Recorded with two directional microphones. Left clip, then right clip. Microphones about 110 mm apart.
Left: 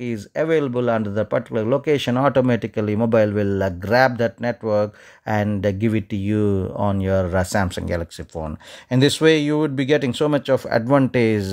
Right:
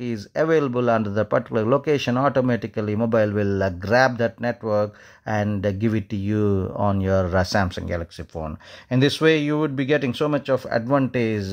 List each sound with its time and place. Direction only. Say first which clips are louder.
0.0 s speech: even; 5° left (ahead or behind)
2.1 s speech: left 3 dB; 30° left (ahead or behind)
5.8 s speech: left 2 dB; 15° left (ahead or behind)
7.6 s speech: left 3 dB; 30° left (ahead or behind)